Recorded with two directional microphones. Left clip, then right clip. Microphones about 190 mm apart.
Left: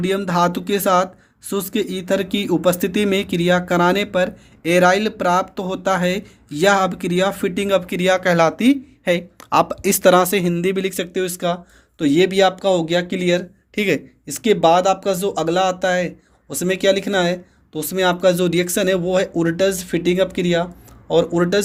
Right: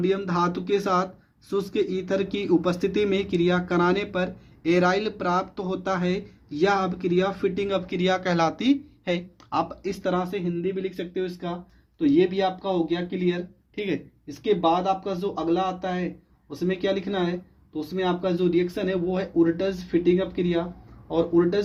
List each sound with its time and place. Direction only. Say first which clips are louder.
0.0 s speech: left 6 dB; 40° left (ahead or behind); by 21.6 s 75° left (ahead or behind)